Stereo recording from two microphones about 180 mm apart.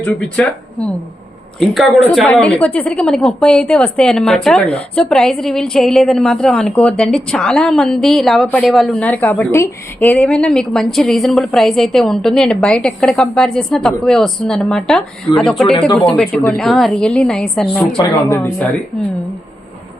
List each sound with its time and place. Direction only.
0.0 s a woman's voice: 5° left (ahead or behind)
17.9 s speech: 20° left (ahead or behind)